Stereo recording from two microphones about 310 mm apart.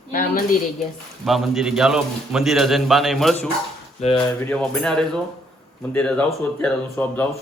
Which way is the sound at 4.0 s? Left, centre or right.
Left.